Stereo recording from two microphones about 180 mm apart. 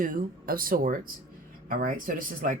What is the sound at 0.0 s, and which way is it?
A woman's voice, 50° right (ahead or behind).